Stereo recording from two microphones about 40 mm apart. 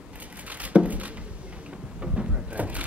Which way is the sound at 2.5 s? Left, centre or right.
Right.